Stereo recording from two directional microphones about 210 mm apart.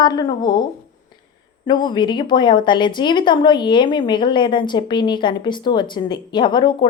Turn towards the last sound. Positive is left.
turn(degrees=20)  # may be behind; listen again after turning